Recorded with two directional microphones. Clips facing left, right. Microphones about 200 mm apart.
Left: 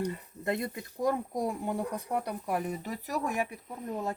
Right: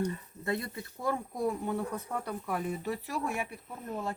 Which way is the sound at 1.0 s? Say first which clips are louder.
Left 2 dB; 15° left (ahead or behind).